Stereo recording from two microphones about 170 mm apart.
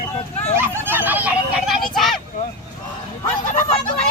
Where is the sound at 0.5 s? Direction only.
10° right (ahead or behind).